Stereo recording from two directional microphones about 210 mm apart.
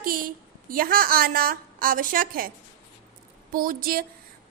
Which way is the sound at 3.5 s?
40° right (ahead or behind).